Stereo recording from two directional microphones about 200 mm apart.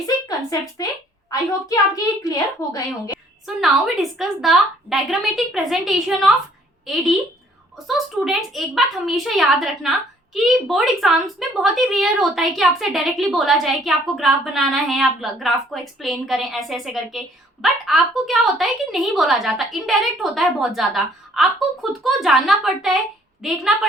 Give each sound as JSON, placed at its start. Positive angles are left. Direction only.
{"t": 0.0, "sound": "speech", "side_deg": 20}
{"t": 2.2, "sound": "a woman's voice", "side_deg": 15}
{"t": 3.1, "sound": "speech", "side_deg": 0}